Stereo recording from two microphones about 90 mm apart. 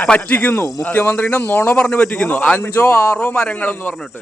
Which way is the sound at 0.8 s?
20° left (ahead or behind).